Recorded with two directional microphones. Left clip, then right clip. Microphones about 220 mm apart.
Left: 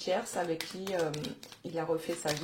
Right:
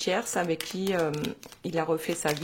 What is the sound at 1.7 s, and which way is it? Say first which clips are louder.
Speech: right 5 dB; 35° right (ahead or behind).